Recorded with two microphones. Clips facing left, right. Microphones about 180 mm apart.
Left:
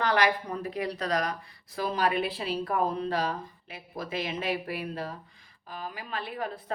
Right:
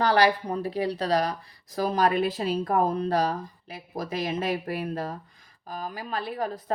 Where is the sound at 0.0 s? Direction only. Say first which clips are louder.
Right 4 dB; 35° right (ahead or behind).